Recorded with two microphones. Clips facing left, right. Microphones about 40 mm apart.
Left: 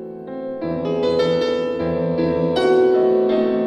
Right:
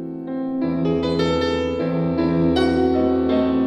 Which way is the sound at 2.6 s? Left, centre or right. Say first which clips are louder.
Left 4 dB; left.